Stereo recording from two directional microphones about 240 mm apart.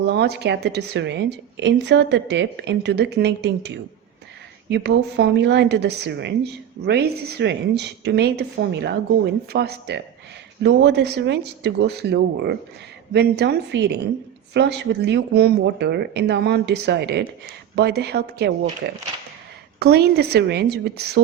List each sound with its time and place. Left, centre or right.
0.1 s a woman's voice: right